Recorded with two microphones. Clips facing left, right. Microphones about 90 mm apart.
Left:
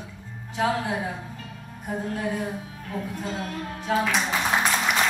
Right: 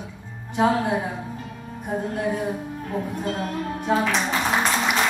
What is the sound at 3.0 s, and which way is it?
Speech, 15° right (ahead or behind).